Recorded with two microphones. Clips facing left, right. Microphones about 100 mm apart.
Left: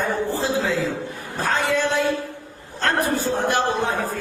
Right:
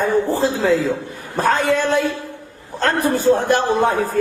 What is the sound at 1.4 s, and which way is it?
A man's voice, 45° right (ahead or behind).